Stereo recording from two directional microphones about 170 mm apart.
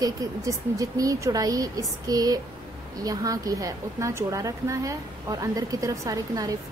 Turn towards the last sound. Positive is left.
turn(degrees=-20)  # may be behind; listen again after turning